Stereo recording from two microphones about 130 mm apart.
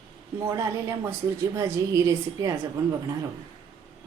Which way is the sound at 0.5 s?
30° right (ahead or behind).